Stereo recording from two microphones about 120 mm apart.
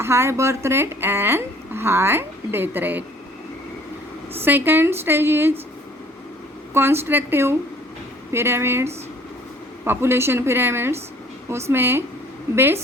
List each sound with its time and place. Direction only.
0.0 s a woman's voice: 20° right (ahead or behind)
4.4 s a woman's voice: 15° right (ahead or behind)
6.7 s a woman's voice: 20° right (ahead or behind)